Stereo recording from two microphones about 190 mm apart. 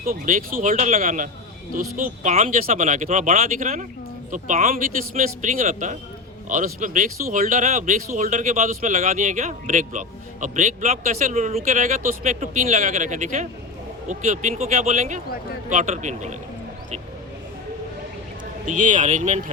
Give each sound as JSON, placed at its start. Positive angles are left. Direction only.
{"t": 0.0, "sound": "speech", "side_deg": -45}
{"t": 18.6, "sound": "speech", "side_deg": -45}